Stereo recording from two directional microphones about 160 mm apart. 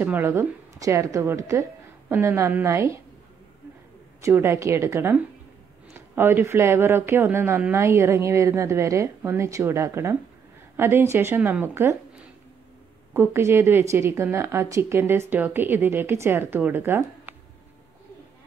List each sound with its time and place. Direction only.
0.0 s speech: 10° right (ahead or behind)
4.2 s speech: 15° right (ahead or behind)
13.1 s speech: 15° right (ahead or behind)